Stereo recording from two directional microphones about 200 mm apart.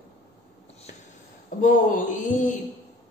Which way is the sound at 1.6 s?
40° left (ahead or behind).